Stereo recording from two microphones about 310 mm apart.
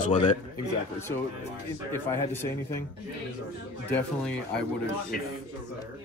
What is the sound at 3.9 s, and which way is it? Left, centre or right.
Speech, centre.